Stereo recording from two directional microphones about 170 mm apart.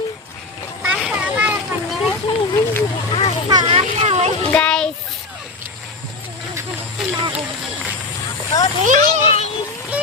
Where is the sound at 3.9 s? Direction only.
40° right (ahead or behind).